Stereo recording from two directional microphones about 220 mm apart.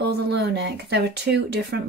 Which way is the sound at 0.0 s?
50° right (ahead or behind).